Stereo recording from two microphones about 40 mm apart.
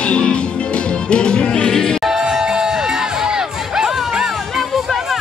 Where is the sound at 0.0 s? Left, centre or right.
Left.